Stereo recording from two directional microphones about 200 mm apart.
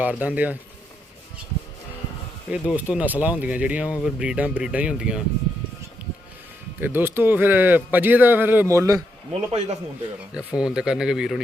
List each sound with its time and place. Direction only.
0.0 s a man's voice: 5° right (ahead or behind)
2.5 s a man's voice: 5° right (ahead or behind)
6.7 s a man's voice: 10° right (ahead or behind)
9.5 s a man's voice: 30° right (ahead or behind)
10.3 s speech: 5° right (ahead or behind)